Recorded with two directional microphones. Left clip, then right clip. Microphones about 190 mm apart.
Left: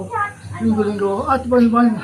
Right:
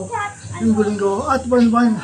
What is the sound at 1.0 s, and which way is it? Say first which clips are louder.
Speech: even; 20° right (ahead or behind).